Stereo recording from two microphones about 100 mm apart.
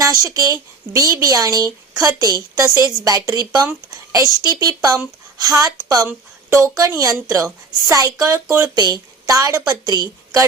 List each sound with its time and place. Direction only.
0.0 s speech: 35° right (ahead or behind)
6.1 s speech: 30° right (ahead or behind)